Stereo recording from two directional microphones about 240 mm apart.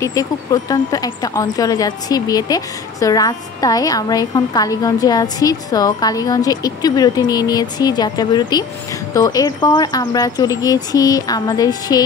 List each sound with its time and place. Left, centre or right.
0.0 s speech: centre